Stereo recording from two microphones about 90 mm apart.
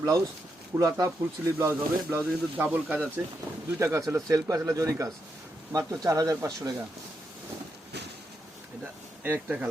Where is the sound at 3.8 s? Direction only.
35° right (ahead or behind).